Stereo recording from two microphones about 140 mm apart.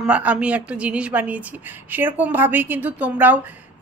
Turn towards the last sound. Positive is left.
turn(degrees=-10)  # may be behind; listen again after turning